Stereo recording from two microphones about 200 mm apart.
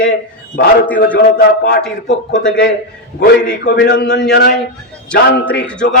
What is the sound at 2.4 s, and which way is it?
A man's voice, 70° left (ahead or behind).